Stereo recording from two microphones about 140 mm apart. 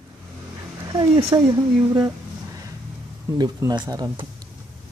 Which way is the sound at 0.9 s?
30° right (ahead or behind).